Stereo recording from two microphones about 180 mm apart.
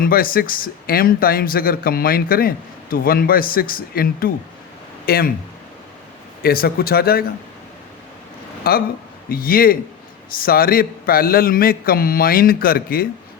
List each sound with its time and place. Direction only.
0.0 s speech: 55° left (ahead or behind)
6.4 s speech: 55° left (ahead or behind)
8.7 s speech: 55° left (ahead or behind)